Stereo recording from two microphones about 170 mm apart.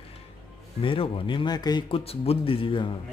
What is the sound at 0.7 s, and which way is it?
Speech, 30° left (ahead or behind).